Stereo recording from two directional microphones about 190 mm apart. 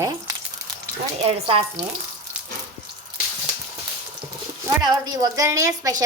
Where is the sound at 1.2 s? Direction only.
30° right (ahead or behind).